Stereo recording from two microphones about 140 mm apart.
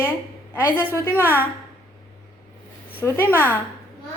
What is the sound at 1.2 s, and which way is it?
Speech, 15° right (ahead or behind).